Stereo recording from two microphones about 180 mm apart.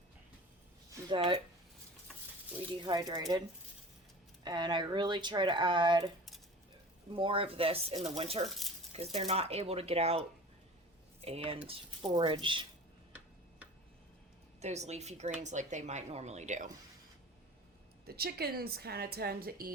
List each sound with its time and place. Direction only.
0.9 s a sound: 30° right (ahead or behind)
2.8 s speech: 25° right (ahead or behind)
4.4 s speech: 25° right (ahead or behind)
7.1 s speech: 30° right (ahead or behind)
8.4 s speech: centre (ahead or behind)
9.1 s speech: 35° right (ahead or behind)
14.6 s speech: 40° right (ahead or behind)
18.0 s a woman's voice: 60° right (ahead or behind)